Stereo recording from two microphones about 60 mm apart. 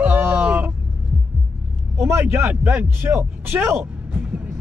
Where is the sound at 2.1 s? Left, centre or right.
Right.